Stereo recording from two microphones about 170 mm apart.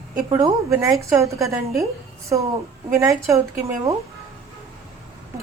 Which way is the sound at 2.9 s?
15° right (ahead or behind).